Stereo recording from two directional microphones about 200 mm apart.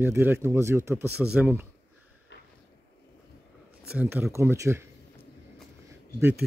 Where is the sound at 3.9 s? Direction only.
5° right (ahead or behind).